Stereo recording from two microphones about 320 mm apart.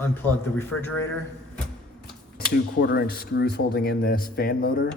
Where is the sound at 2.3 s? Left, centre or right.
Left.